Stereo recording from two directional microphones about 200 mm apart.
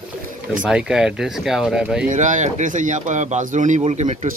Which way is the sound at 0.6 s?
5° right (ahead or behind).